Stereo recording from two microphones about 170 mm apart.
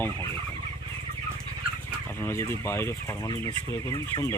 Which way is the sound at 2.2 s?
15° left (ahead or behind).